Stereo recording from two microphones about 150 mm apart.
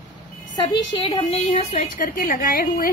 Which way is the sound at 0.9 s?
35° left (ahead or behind).